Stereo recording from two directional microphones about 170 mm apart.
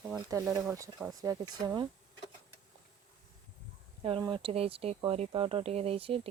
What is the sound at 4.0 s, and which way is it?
Speech, 30° right (ahead or behind).